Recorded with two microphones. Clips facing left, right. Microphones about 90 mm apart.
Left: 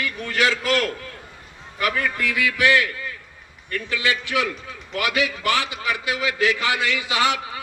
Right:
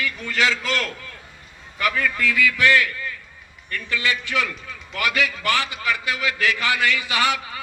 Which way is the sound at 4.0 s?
15° left (ahead or behind).